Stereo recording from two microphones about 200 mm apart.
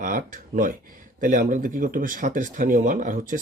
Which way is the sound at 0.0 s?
40° right (ahead or behind).